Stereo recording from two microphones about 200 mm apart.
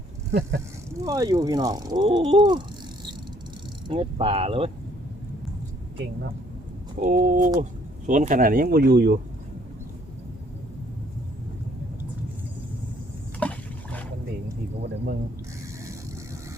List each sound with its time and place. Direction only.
0.3 s speech: 55° right (ahead or behind)
1.0 s speech: 15° right (ahead or behind)
3.8 s speech: 30° right (ahead or behind)
7.0 s speech: 45° right (ahead or behind)
13.4 s a sound: 5° left (ahead or behind)